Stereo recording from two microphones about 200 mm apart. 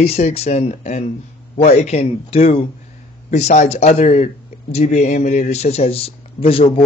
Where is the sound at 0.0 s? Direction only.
30° left (ahead or behind).